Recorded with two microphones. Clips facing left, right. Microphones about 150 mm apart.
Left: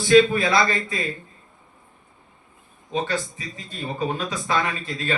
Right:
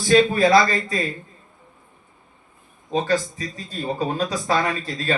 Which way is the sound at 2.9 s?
35° right (ahead or behind).